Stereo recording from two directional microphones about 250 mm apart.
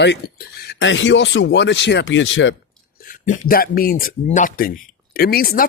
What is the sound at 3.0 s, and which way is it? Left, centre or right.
Speech, left.